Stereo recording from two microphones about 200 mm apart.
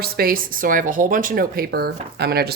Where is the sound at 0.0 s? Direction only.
50° right (ahead or behind).